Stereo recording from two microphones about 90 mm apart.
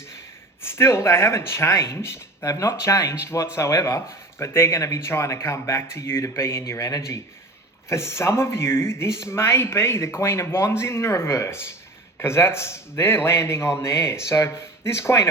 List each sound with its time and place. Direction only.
0.6 s speech: 30° left (ahead or behind)